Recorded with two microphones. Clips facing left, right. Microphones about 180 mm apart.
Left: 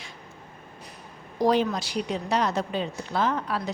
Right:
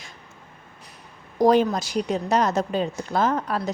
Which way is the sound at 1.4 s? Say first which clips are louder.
Right 4 dB; 45° right (ahead or behind).